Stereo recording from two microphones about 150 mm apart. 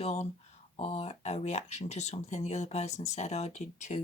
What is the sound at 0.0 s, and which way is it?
Speech, 45° left (ahead or behind).